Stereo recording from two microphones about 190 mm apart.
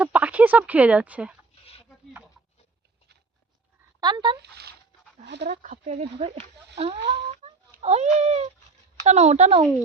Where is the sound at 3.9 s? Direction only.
20° right (ahead or behind).